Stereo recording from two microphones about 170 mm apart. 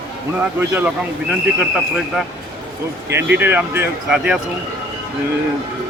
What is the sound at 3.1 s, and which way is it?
Speech, 10° right (ahead or behind).